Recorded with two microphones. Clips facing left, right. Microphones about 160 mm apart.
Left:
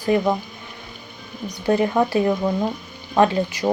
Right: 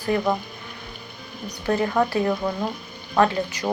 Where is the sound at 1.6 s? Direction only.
25° left (ahead or behind).